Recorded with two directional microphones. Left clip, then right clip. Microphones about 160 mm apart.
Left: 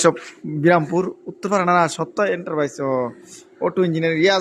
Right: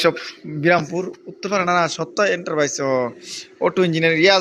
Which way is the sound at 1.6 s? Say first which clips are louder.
Left 1 dB; 25° left (ahead or behind).